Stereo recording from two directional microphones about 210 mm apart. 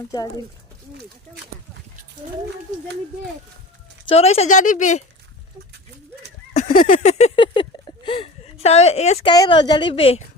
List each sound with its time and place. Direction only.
4.1 s speech: 30° left (ahead or behind)
6.5 s a sound: 35° left (ahead or behind)
9.3 s a woman's voice: 20° left (ahead or behind)